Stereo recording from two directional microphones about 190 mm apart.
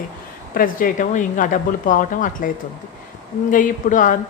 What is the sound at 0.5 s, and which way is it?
A woman's voice, 45° left (ahead or behind).